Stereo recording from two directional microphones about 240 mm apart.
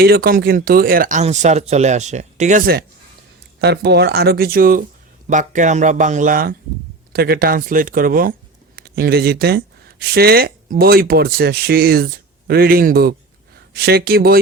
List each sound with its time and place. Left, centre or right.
0.0 s speech: right